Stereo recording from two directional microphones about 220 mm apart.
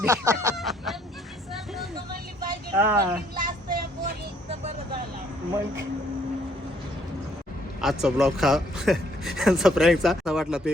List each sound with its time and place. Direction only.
0.0 s a sound: 15° right (ahead or behind)
0.5 s fowl: centre (ahead or behind)
2.7 s a sound: 10° right (ahead or behind)
3.3 s vehicle: 40° right (ahead or behind)
4.4 s vehicle: 25° right (ahead or behind)
7.8 s speech: centre (ahead or behind)